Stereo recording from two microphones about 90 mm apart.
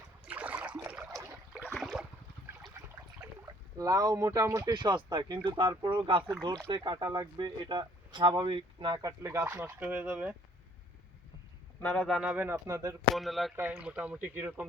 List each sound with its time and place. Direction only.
0.3 s boat: 15° right (ahead or behind)
1.2 s a sound: 15° right (ahead or behind)
1.7 s boat: centre (ahead or behind)
3.4 s speech: 45° right (ahead or behind)
4.6 s speech: 55° right (ahead or behind)
9.2 s speech: 25° right (ahead or behind)
11.8 s speech: 20° left (ahead or behind)
12.2 s speech: 15° right (ahead or behind)
12.5 s speech: 30° right (ahead or behind)
13.1 s speech: centre (ahead or behind)
13.6 s speech: 15° right (ahead or behind)